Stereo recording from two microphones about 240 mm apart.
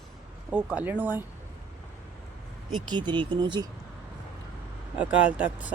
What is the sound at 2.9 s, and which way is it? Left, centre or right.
Speech, centre.